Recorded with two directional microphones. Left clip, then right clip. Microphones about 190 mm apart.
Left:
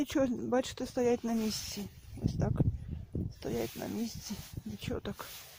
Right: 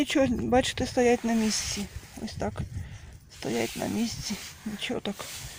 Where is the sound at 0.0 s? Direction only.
15° left (ahead or behind).